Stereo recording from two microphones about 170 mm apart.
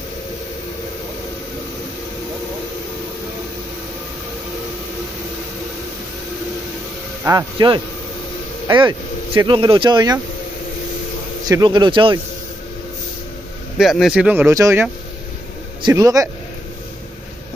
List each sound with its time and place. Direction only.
7.2 s speech: 25° right (ahead or behind)
11.4 s speech: 20° right (ahead or behind)
13.7 s speech: centre (ahead or behind); by 16.3 s 20° right (ahead or behind)